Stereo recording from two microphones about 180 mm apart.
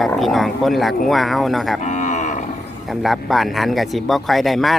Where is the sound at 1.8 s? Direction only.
40° left (ahead or behind).